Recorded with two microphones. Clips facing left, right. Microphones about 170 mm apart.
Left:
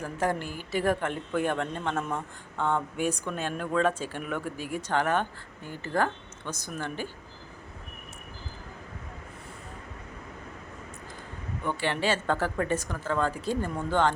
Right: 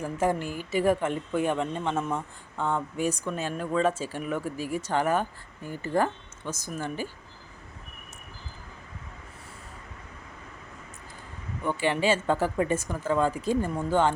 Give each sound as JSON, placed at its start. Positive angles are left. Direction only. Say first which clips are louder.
{"t": 0.0, "sound": "a man's voice", "louder": "right 2 dB", "side_deg": -5}
{"t": 0.4, "sound": "a woman's voice", "louder": "right 4 dB", "side_deg": -45}
{"t": 0.7, "sound": "a man's voice", "louder": "right 3 dB", "side_deg": -5}
{"t": 11.6, "sound": "speech", "louder": "right 3 dB", "side_deg": -5}